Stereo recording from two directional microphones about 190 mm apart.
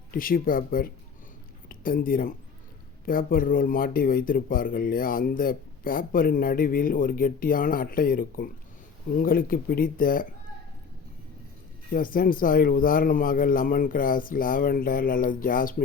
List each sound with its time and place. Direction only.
0.1 s speech: 50° left (ahead or behind)
11.9 s speech: 50° left (ahead or behind)